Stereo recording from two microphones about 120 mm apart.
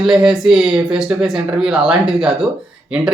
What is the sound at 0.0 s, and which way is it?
Speech, 5° right (ahead or behind).